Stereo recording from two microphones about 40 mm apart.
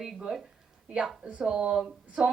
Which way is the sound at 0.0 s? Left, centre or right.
Right.